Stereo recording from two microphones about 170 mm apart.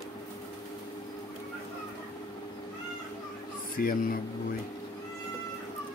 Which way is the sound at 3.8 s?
55° left (ahead or behind).